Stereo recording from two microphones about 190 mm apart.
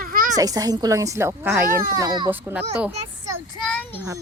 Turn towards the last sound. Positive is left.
turn(degrees=5)  # may be behind; listen again after turning